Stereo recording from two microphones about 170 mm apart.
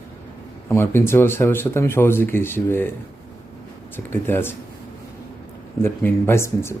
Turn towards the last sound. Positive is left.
turn(degrees=15)  # may be behind; listen again after turning